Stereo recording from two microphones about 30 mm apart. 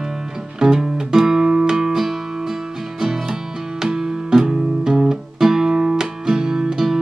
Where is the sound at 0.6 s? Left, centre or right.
Centre.